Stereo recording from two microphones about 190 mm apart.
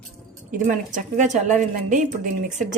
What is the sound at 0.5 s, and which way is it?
Speech, 45° right (ahead or behind).